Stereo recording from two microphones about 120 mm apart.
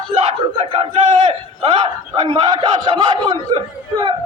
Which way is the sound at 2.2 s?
40° right (ahead or behind).